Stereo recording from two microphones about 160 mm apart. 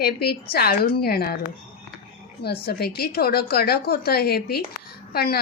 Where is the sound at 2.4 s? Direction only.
80° left.